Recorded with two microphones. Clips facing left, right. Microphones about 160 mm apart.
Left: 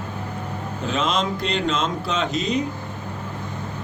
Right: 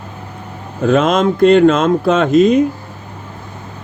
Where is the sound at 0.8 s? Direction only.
50° right (ahead or behind).